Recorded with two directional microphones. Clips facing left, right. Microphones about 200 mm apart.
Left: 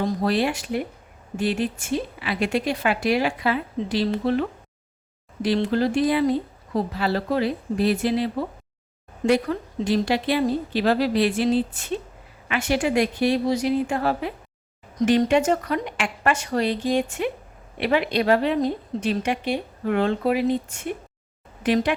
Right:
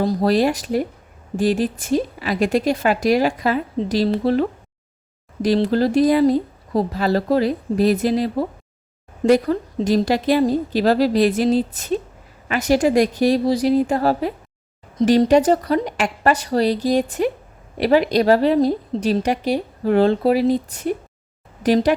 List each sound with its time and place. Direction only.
0.0 s a woman's voice: 35° right (ahead or behind)